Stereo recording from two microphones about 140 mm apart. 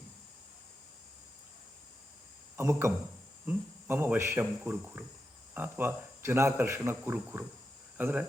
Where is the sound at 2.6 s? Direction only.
20° right (ahead or behind).